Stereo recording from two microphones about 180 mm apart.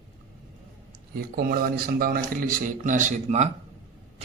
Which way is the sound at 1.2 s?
60° right (ahead or behind).